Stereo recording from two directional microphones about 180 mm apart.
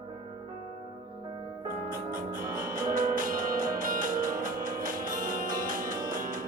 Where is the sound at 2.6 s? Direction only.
50° right (ahead or behind).